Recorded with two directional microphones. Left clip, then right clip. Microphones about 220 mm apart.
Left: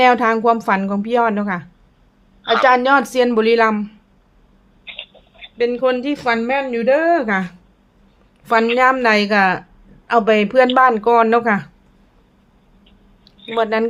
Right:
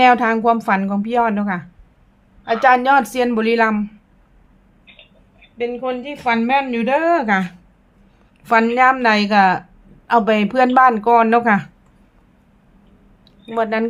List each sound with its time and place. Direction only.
0.0 s a woman's voice: 5° left (ahead or behind)
4.9 s a sound: 50° left (ahead or behind)
5.5 s a woman's voice: 25° left (ahead or behind); by 11.7 s centre (ahead or behind)
13.5 s a woman's voice: 5° left (ahead or behind)